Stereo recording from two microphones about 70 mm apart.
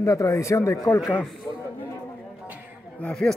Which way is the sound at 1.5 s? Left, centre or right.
Left.